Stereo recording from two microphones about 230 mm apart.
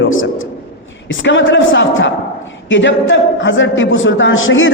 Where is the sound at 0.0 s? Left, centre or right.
Left.